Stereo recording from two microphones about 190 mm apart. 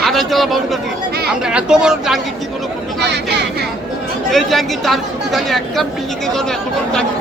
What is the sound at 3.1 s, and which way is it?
Speech, 65° right (ahead or behind).